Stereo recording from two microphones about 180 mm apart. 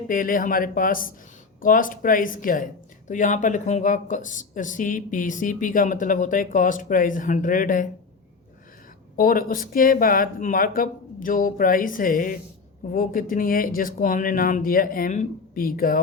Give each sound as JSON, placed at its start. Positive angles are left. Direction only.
{"t": 0.1, "sound": "speech", "side_deg": 50}
{"t": 9.1, "sound": "speech", "side_deg": 50}